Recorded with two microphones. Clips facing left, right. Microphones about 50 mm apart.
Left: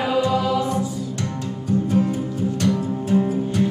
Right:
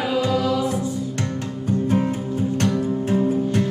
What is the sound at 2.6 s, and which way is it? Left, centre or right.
Music, right.